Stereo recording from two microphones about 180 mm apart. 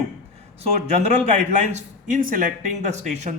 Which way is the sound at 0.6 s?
35° right (ahead or behind).